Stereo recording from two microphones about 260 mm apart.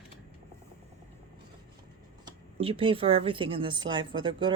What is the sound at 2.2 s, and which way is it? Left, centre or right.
Speech, right.